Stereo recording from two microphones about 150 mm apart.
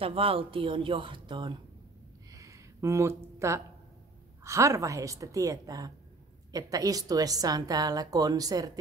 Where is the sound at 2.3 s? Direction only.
20° right (ahead or behind).